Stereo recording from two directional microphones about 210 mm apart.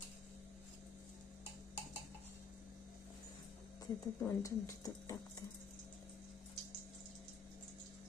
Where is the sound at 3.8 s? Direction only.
15° left (ahead or behind).